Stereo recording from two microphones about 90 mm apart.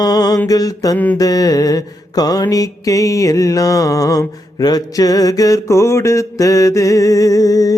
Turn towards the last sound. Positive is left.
turn(degrees=40)  # may be behind; listen again after turning